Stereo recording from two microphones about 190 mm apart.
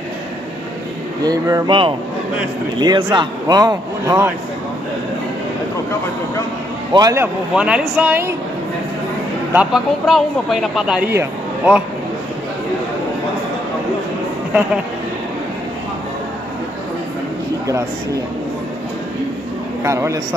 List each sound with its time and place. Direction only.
1.2 s speech: 20° right (ahead or behind)
6.9 s speech: 20° right (ahead or behind)
7.5 s speech: 5° right (ahead or behind)
9.5 s speech: 5° right (ahead or behind)
19.8 s speech: 15° right (ahead or behind)